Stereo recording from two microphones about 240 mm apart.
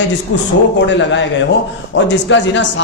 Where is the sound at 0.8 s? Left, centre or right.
Left.